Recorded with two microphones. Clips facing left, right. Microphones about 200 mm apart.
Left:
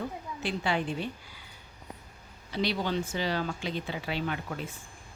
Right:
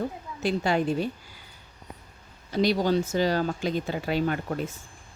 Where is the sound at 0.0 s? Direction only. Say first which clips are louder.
Right 5 dB; 40° right (ahead or behind).